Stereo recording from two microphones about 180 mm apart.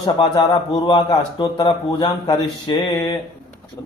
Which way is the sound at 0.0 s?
25° left (ahead or behind).